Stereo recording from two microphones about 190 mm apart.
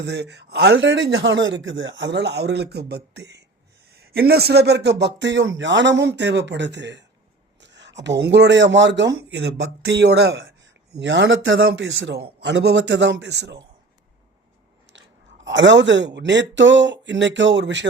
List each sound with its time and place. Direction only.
0.0 s a man's voice: 60° right (ahead or behind)
15.4 s speech: 70° right (ahead or behind)